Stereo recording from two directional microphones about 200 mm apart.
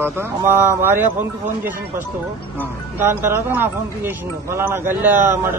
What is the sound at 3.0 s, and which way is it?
Speech, 10° right (ahead or behind).